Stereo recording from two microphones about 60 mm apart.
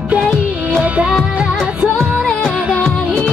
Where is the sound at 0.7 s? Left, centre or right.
Right.